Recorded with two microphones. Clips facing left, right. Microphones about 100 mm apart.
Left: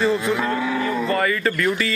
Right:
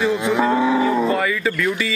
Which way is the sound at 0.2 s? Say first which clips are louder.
Right 5 dB; 20° right (ahead or behind).